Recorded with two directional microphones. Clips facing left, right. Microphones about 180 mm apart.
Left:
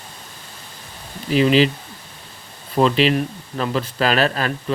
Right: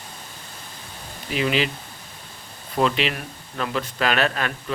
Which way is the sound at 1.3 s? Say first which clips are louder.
Left 8 dB; 35° left (ahead or behind).